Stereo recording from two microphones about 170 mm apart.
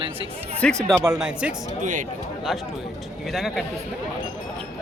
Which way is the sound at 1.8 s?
50° right (ahead or behind).